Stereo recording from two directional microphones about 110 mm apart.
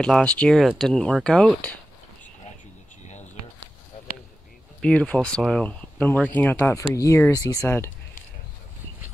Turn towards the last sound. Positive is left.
turn(degrees=35)  # may be behind; listen again after turning